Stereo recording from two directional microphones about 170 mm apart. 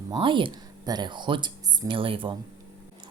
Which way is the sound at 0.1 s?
30° right (ahead or behind).